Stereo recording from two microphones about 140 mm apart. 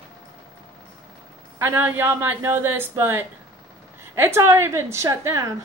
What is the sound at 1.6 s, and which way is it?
A woman's voice, 15° right (ahead or behind).